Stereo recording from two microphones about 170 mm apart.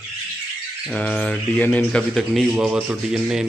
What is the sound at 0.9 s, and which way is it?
Speech, 10° left (ahead or behind).